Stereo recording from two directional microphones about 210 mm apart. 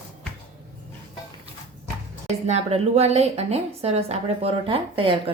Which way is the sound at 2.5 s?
30° right (ahead or behind).